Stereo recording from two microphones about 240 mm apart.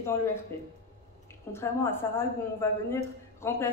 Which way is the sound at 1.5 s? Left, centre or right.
Centre.